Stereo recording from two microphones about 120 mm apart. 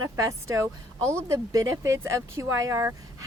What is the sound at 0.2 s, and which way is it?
Speech, 25° right (ahead or behind).